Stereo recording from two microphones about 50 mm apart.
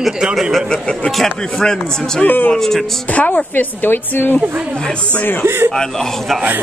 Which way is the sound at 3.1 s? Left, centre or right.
Left.